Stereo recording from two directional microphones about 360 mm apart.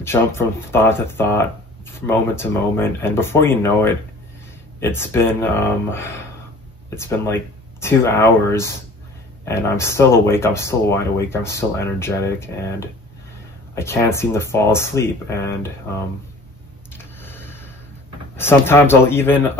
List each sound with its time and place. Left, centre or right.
0.0 s speech: centre
16.9 s a sound: centre
18.3 s speech: centre